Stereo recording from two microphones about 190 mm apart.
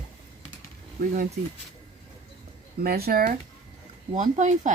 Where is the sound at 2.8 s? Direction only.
55° right (ahead or behind).